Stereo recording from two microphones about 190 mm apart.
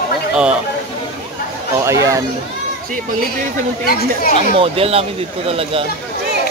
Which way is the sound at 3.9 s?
50° left (ahead or behind).